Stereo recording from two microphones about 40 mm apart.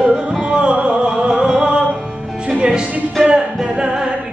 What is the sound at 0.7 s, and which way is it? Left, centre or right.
Music, right.